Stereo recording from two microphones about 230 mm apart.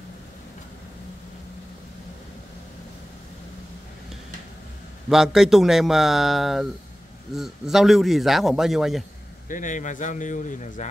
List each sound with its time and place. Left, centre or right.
5.1 s a man's voice: centre
9.5 s speech: left